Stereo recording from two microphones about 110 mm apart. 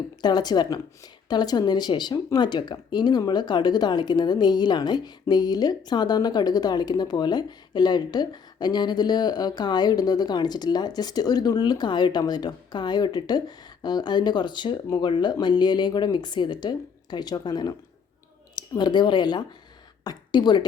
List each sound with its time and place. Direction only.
0.2 s a woman's voice: 40° left (ahead or behind)